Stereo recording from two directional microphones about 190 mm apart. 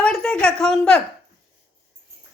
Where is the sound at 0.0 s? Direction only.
5° left (ahead or behind).